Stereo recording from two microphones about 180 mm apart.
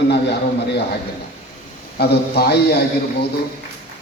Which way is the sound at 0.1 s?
70° left (ahead or behind).